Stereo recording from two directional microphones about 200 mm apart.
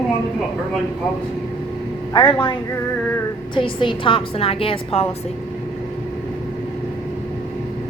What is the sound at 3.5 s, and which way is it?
A woman's voice, 25° left (ahead or behind).